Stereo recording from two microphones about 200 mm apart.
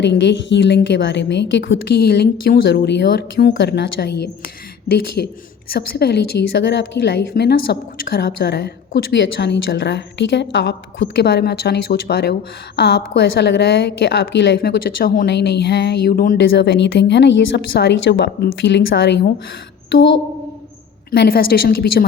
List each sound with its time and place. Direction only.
0.0 s a woman's voice: 60° left (ahead or behind)
2.0 s a woman's voice: 50° left (ahead or behind)
16.4 s a woman's voice: 60° left (ahead or behind)
21.1 s speech: 50° left (ahead or behind)